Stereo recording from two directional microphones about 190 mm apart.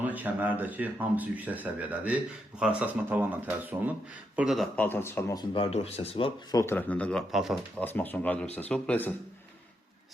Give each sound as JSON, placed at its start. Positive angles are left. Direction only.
{"t": 0.0, "sound": "speech", "side_deg": -10}
{"t": 6.6, "sound": "speech", "side_deg": 10}
{"t": 7.9, "sound": "speech", "side_deg": 10}